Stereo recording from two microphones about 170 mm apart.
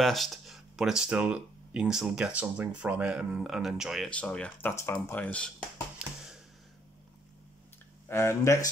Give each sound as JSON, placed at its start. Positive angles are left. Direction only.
{"t": 0.0, "sound": "speech", "side_deg": 0}
{"t": 5.9, "sound": "a sound", "side_deg": -5}
{"t": 8.1, "sound": "speech", "side_deg": 15}